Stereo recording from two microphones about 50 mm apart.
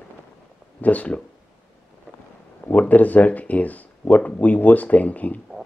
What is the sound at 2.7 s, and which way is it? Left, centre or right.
Speech, left.